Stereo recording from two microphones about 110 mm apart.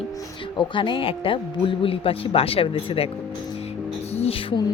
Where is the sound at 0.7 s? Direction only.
50° left (ahead or behind).